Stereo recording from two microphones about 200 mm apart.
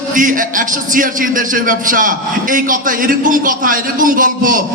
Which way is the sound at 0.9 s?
40° right (ahead or behind).